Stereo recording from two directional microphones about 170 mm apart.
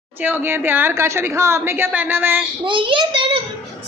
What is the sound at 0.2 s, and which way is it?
A woman's voice, 10° right (ahead or behind).